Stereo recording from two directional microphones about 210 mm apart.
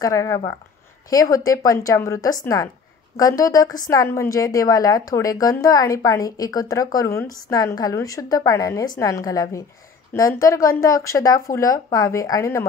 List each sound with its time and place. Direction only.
0.0 s a woman's voice: 15° left (ahead or behind)